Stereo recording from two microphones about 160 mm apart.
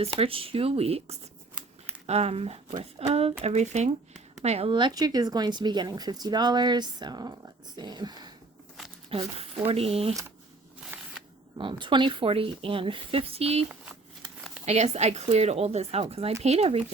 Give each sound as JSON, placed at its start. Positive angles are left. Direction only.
{"t": 0.0, "sound": "a woman's voice", "side_deg": -35}
{"t": 9.0, "sound": "a woman's voice", "side_deg": -35}
{"t": 10.9, "sound": "shuffling cards", "side_deg": -15}
{"t": 11.5, "sound": "a woman's voice", "side_deg": -30}